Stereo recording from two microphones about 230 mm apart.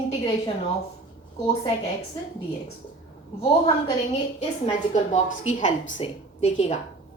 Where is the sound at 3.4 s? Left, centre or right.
Left.